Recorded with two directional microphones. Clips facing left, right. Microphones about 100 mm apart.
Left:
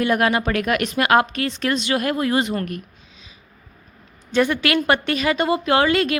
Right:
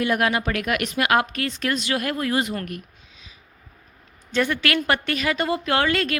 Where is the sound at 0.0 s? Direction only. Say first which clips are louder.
Left 3 dB; 35° left (ahead or behind).